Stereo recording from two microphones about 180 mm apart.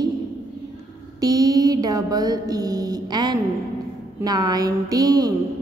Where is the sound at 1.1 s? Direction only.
20° right (ahead or behind).